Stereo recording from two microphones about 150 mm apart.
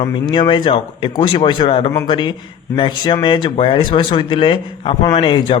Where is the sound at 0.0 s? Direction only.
30° left (ahead or behind).